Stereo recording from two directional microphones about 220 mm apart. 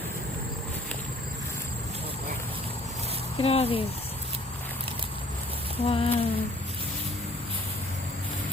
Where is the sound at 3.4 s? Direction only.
25° left (ahead or behind).